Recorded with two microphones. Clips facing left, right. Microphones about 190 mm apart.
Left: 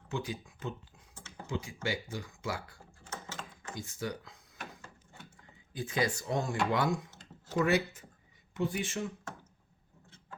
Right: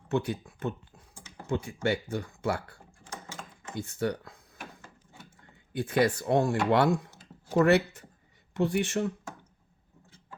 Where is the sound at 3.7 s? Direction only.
60° right (ahead or behind).